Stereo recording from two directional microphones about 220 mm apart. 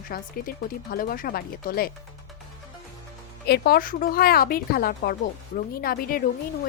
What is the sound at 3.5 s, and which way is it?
Speech, 45° left (ahead or behind).